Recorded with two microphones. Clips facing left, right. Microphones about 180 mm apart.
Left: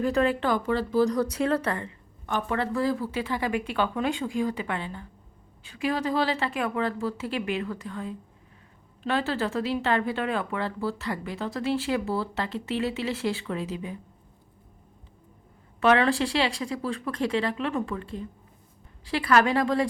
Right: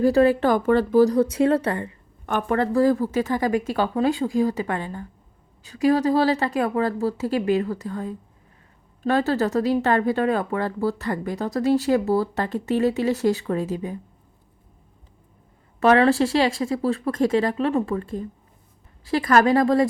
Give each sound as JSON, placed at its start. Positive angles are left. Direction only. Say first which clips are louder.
{"t": 0.0, "sound": "speech", "louder": "right 7 dB", "side_deg": -35}
{"t": 1.0, "sound": "speech", "louder": "right 6 dB", "side_deg": -30}
{"t": 2.2, "sound": "speech", "louder": "right 6 dB", "side_deg": -50}
{"t": 15.8, "sound": "speech", "louder": "right 5 dB", "side_deg": -40}